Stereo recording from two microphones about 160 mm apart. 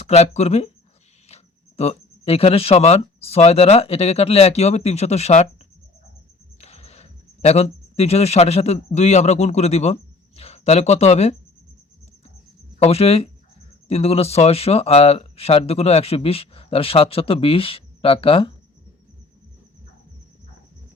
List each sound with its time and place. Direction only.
0.0 s speech: 40° left (ahead or behind)
12.8 s speech: 40° left (ahead or behind)